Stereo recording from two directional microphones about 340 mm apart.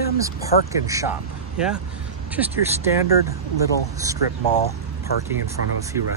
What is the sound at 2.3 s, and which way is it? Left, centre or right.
Speech, centre.